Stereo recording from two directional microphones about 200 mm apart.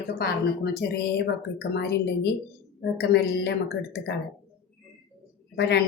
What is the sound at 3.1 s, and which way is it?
A woman's voice, 55° left (ahead or behind).